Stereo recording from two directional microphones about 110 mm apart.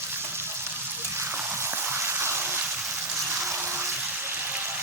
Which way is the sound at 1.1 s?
20° right (ahead or behind).